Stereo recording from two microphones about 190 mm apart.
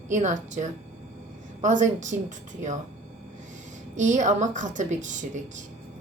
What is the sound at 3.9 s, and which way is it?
A woman's voice, 40° right (ahead or behind).